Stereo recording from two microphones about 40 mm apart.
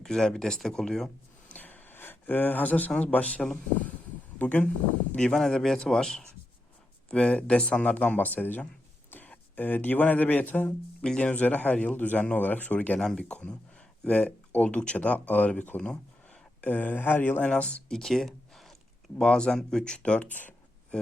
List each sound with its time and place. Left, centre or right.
0.0 s speech: centre
1.5 s a sound: left
3.0 s speech: left
5.3 s speech: centre
7.1 s speech: left
11.2 s speech: left
13.0 s speech: centre
13.2 s speech: left
15.8 s a sound: left
16.6 s speech: left
17.4 s speech: left
17.8 s a sound: centre
19.2 s speech: centre
20.2 s speech: left